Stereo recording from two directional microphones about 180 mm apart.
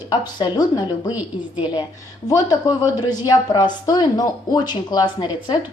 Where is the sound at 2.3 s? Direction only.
20° left (ahead or behind).